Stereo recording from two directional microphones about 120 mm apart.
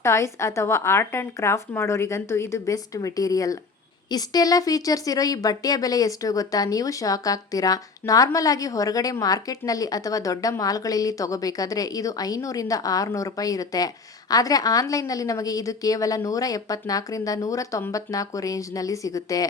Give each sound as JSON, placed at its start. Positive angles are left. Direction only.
{"t": 0.0, "sound": "speech", "side_deg": 25}